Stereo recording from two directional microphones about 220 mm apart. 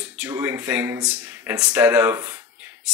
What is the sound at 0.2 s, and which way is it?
Speech, 10° right (ahead or behind).